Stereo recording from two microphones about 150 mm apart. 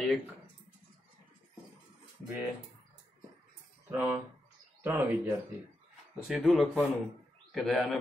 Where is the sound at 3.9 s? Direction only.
15° right (ahead or behind).